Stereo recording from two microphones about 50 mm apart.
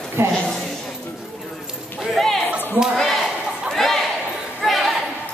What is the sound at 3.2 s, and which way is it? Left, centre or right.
Chatter, centre.